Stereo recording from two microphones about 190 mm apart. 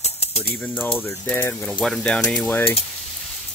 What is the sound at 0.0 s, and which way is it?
Typewriter, 35° left (ahead or behind).